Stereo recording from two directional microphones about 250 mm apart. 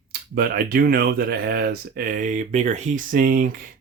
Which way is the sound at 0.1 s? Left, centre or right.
Right.